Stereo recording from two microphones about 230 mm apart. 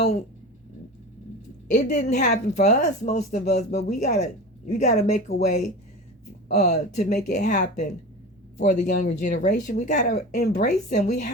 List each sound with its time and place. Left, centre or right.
1.7 s a woman's voice: left